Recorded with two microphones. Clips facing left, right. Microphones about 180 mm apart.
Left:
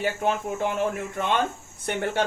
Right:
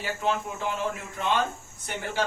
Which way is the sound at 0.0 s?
55° left (ahead or behind).